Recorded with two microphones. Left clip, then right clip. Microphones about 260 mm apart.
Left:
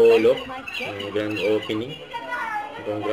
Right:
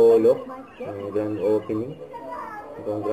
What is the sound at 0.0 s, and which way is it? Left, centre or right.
Speech, left.